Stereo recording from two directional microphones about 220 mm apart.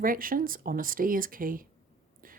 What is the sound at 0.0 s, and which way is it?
Speech, 40° right (ahead or behind).